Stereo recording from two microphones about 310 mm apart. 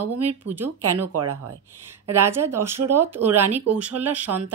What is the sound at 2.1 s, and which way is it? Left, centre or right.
Speech, centre.